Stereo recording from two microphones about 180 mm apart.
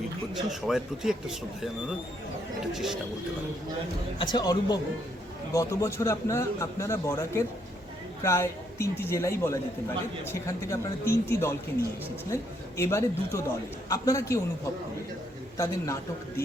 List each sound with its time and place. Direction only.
0.6 s a man's voice: centre (ahead or behind)
2.7 s a man's voice: centre (ahead or behind)
4.2 s a man's voice: 25° left (ahead or behind)
15.5 s a man's voice: 20° left (ahead or behind)